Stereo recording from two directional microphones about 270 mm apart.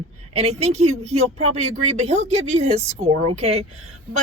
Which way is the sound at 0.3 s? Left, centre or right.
Right.